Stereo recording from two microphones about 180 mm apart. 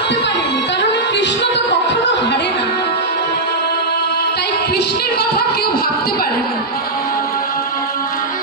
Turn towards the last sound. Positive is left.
turn(degrees=55)  # may be behind; listen again after turning